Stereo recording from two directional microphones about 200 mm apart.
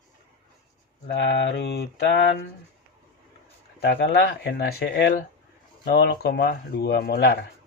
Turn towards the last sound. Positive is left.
turn(degrees=55)  # may be behind; listen again after turning